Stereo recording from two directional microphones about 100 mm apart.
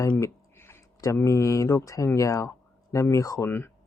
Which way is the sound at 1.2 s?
30° left (ahead or behind).